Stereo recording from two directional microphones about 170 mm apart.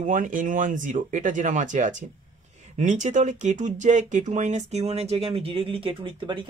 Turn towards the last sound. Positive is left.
turn(degrees=-30)  # may be behind; listen again after turning